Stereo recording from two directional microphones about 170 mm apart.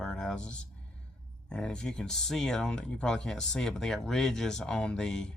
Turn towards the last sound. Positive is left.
turn(degrees=5)  # may be behind; listen again after turning